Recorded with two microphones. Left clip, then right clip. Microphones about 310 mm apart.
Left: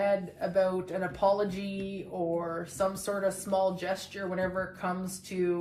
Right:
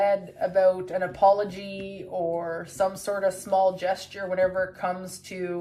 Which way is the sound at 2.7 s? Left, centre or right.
Right.